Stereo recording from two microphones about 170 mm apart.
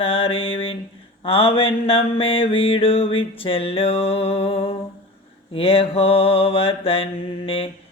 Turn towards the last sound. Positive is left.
turn(degrees=30)  # may be behind; listen again after turning